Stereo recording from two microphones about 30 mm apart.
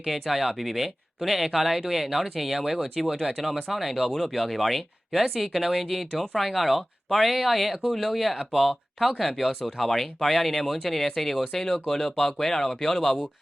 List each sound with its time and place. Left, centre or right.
0.0 s speech: centre